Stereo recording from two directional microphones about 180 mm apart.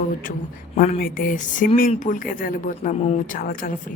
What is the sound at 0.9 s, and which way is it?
Speech, 55° left (ahead or behind).